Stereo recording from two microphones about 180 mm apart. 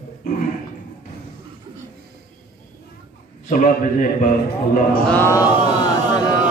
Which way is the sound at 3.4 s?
45° left (ahead or behind).